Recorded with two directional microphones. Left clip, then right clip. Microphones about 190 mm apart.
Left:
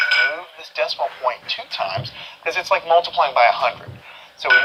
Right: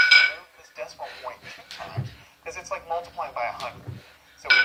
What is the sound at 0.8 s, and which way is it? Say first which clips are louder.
Speech: left 14 dB; 40° left (ahead or behind).